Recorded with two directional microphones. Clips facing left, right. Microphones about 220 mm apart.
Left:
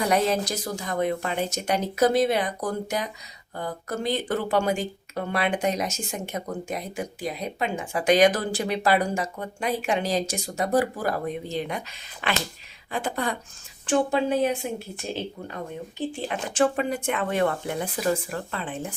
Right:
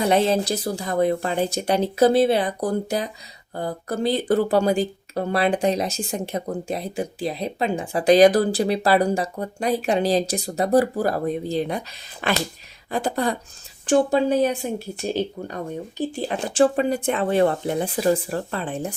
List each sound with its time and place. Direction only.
0.0 s speech: 25° right (ahead or behind)
16.0 s speech: 35° right (ahead or behind)